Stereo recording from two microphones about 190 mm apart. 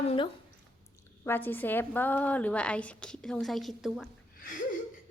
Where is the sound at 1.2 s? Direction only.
10° left (ahead or behind).